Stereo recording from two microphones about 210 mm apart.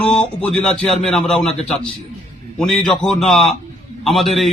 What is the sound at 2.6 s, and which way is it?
Speech, 5° left (ahead or behind).